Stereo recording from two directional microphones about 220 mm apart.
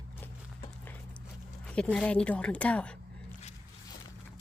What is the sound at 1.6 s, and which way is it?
A woman's voice, 5° left (ahead or behind).